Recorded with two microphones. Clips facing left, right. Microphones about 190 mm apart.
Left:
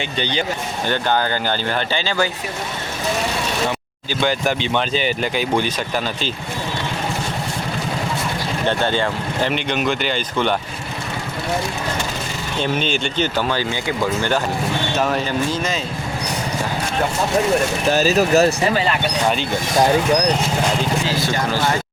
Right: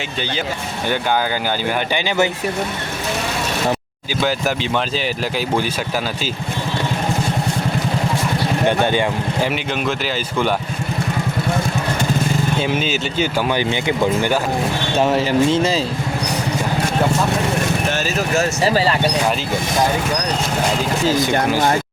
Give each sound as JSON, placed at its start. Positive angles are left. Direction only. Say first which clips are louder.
{"t": 2.0, "sound": "speech", "louder": "right 5 dB", "side_deg": -20}
{"t": 4.2, "sound": "speech", "louder": "even", "side_deg": -5}
{"t": 8.6, "sound": "speech", "louder": "right 2 dB", "side_deg": -15}
{"t": 12.6, "sound": "speech", "louder": "right 1 dB", "side_deg": -5}
{"t": 17.9, "sound": "speech", "louder": "left 5 dB", "side_deg": 35}
{"t": 18.6, "sound": "speech", "louder": "right 2 dB", "side_deg": -35}